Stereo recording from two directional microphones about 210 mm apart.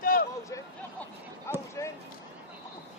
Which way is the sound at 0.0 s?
45° left (ahead or behind).